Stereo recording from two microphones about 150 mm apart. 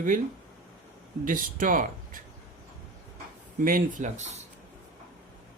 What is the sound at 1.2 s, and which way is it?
Speech, 65° right (ahead or behind).